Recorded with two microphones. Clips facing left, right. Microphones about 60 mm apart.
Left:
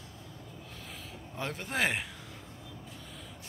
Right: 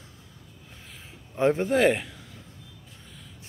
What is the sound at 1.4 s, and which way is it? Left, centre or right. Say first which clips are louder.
Speech: right 15 dB; right.